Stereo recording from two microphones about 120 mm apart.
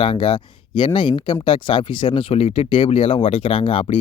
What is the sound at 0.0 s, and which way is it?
Speech, 45° left (ahead or behind).